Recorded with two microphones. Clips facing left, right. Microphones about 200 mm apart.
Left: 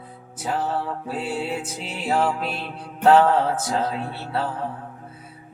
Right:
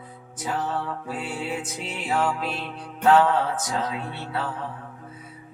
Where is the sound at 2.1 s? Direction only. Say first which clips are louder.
Left 3 dB; 30° left (ahead or behind).